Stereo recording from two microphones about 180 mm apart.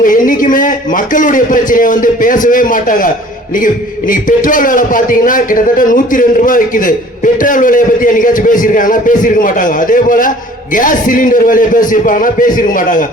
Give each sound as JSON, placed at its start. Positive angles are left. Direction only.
{"t": 0.0, "sound": "a man's voice", "side_deg": 50}
{"t": 4.1, "sound": "a man's voice", "side_deg": 50}